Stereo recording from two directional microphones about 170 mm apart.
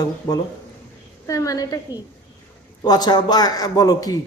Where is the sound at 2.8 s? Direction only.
25° left (ahead or behind).